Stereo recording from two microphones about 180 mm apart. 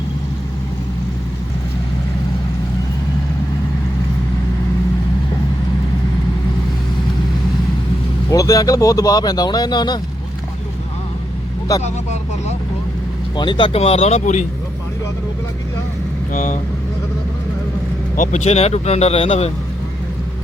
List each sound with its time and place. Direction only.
8.3 s speech: 20° left (ahead or behind)
13.3 s speech: 25° left (ahead or behind)
16.3 s speech: 45° left (ahead or behind)
18.2 s speech: 45° left (ahead or behind)